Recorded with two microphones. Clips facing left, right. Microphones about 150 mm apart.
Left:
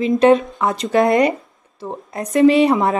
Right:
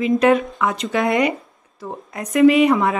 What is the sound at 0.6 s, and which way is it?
Speech, 35° left (ahead or behind).